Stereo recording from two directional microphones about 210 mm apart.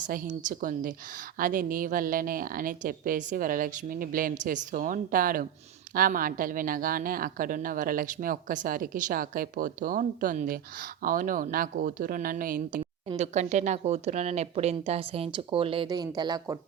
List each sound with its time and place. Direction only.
0.0 s a woman's voice: 40° right (ahead or behind); by 16.6 s 20° right (ahead or behind)